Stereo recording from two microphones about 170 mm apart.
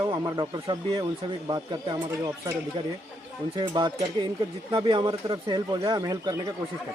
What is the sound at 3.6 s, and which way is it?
Speech, 25° right (ahead or behind).